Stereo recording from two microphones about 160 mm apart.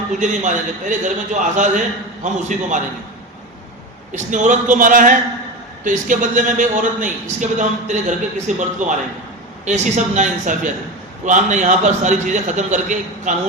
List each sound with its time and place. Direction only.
0.2 s a man's voice: 50° right (ahead or behind)
4.1 s a man's voice: 50° right (ahead or behind)